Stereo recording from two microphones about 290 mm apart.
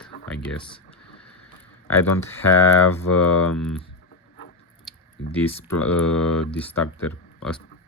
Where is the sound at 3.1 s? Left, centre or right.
Left.